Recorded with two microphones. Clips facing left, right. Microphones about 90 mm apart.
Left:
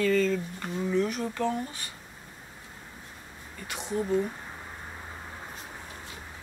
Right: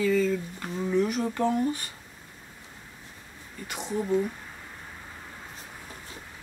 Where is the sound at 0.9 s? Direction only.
15° right (ahead or behind).